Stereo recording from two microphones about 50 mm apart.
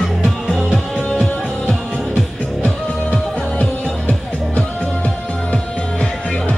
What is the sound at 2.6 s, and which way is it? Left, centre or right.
Music, left.